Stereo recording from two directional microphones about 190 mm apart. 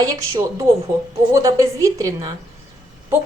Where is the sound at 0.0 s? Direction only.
20° right (ahead or behind).